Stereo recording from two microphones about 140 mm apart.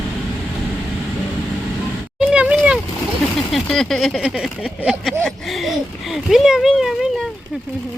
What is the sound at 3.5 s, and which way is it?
Speech, 5° left (ahead or behind).